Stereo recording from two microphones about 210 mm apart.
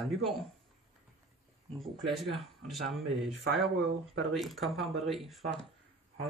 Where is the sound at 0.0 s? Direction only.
Centre (ahead or behind).